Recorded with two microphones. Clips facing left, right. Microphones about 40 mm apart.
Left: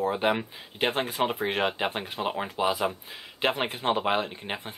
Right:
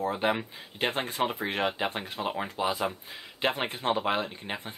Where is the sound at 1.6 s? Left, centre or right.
Centre.